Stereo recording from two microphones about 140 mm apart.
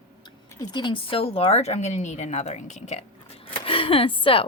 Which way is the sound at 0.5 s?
35° left (ahead or behind).